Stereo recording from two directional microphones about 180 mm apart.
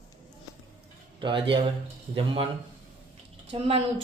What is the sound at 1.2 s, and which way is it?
A woman's voice, 25° right (ahead or behind).